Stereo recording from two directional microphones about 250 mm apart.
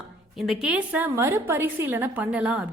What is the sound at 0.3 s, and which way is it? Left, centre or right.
A woman's voice, centre.